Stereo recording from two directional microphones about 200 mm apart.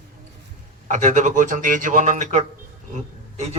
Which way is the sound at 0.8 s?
35° right (ahead or behind).